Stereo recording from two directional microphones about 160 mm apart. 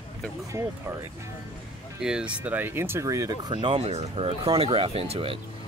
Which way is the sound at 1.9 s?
5° right (ahead or behind).